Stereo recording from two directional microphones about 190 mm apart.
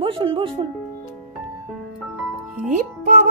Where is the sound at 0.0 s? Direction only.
30° right (ahead or behind).